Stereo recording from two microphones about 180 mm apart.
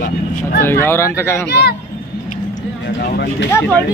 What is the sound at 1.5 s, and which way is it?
Speech, 65° left (ahead or behind).